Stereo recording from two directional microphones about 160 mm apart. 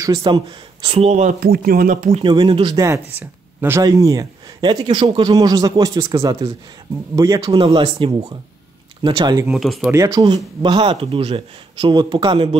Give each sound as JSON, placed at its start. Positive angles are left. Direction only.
{"t": 0.0, "sound": "speech", "side_deg": -30}
{"t": 0.8, "sound": "speech", "side_deg": -40}
{"t": 1.4, "sound": "speech", "side_deg": -70}
{"t": 2.2, "sound": "speech", "side_deg": -30}
{"t": 7.5, "sound": "speech", "side_deg": -35}
{"t": 9.5, "sound": "speech", "side_deg": 0}
{"t": 9.8, "sound": "speech", "side_deg": -20}